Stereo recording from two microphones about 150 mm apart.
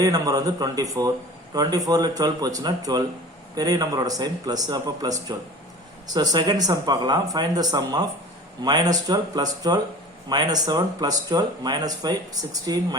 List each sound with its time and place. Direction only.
0.0 s speech: 25° right (ahead or behind)
6.1 s speech: 25° right (ahead or behind)